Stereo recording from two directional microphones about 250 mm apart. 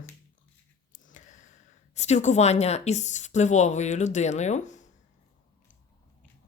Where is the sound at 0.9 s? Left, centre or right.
Left.